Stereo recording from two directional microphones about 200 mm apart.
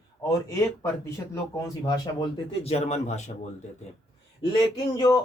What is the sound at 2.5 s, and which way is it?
Speech, 30° left (ahead or behind).